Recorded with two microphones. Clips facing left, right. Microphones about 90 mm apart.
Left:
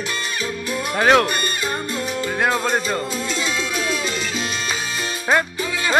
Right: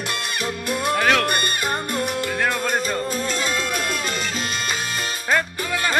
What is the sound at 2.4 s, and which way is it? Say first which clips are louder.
Music: left 4 dB; 15° left (ahead or behind).